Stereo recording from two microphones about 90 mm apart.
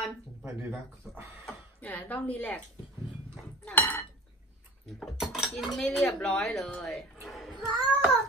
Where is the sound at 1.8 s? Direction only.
15° left (ahead or behind).